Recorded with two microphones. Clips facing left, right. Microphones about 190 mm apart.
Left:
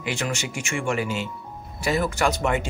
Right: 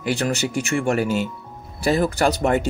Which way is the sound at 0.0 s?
35° right (ahead or behind).